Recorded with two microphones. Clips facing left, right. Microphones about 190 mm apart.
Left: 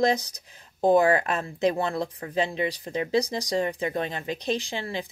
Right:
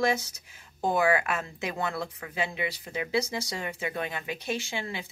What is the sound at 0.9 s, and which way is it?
Speech, 40° left (ahead or behind).